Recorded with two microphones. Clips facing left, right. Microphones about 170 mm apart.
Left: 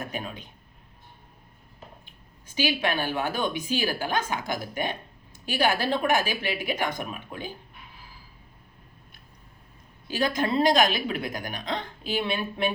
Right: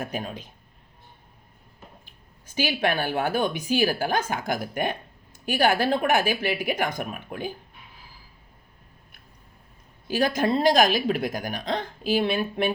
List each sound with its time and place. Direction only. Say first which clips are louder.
0.0 s speech: right 3 dB; 45° right (ahead or behind)
2.6 s speech: right 2 dB; 50° right (ahead or behind)
10.2 s speech: right 2 dB; 40° right (ahead or behind)